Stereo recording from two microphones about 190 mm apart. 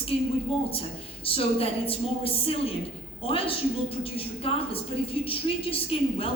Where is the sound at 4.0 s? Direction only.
30° left (ahead or behind).